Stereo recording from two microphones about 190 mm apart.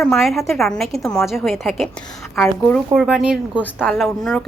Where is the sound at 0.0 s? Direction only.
Centre (ahead or behind).